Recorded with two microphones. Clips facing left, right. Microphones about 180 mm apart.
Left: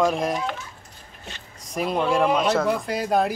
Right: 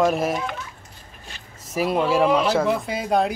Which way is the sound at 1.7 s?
5° right (ahead or behind).